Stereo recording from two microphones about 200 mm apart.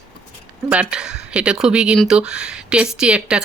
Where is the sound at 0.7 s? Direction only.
5° right (ahead or behind).